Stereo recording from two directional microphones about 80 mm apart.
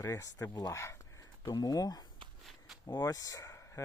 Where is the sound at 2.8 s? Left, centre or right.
Left.